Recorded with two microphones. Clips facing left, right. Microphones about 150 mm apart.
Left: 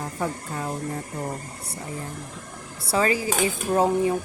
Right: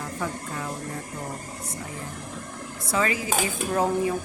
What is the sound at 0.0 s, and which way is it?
Speech, 35° left (ahead or behind).